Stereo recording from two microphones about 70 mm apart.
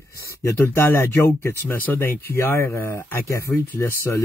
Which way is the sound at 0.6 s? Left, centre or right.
Left.